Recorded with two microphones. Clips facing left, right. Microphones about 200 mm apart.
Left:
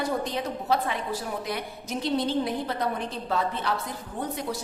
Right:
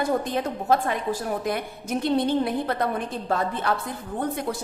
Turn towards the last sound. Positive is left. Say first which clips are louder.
# right 3 dB
turn(degrees=-50)  # may be behind; listen again after turning